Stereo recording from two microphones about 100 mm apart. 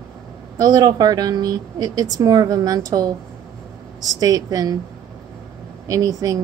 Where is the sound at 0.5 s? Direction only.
40° right (ahead or behind).